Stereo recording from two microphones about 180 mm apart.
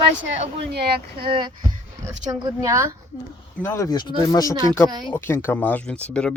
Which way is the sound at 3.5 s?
15° left (ahead or behind).